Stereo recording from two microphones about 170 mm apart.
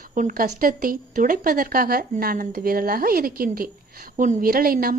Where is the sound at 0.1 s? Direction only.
50° right (ahead or behind).